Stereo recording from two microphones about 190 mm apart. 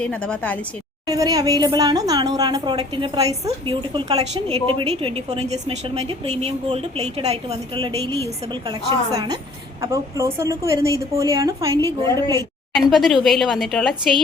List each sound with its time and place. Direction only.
0.0 s a woman's voice: 5° left (ahead or behind)
1.0 s a woman's voice: 20° right (ahead or behind)
12.7 s speech: centre (ahead or behind)